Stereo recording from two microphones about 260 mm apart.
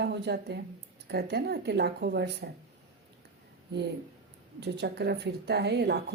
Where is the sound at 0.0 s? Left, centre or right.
Right.